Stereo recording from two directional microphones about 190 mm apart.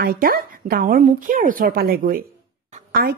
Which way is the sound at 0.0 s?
50° right (ahead or behind).